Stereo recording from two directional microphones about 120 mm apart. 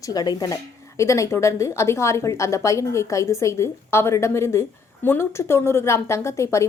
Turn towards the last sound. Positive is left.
turn(degrees=25)  # may be behind; listen again after turning